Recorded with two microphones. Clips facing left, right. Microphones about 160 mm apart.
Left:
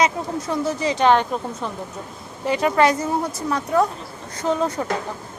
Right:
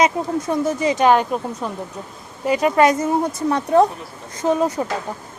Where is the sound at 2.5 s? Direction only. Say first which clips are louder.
Right 2 dB; 15° right (ahead or behind).